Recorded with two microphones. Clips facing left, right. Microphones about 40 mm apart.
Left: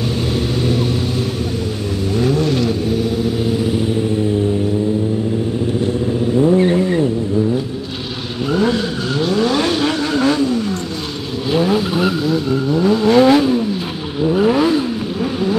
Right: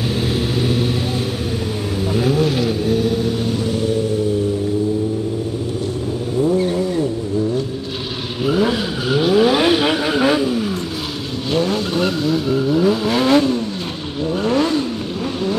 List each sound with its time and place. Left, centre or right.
0.4 s vehicle: centre
2.1 s vehicle: centre
6.4 s vehicle: left
8.5 s vehicle: centre
11.5 s vehicle: centre